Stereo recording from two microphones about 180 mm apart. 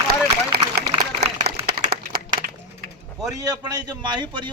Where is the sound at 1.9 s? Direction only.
55° right (ahead or behind).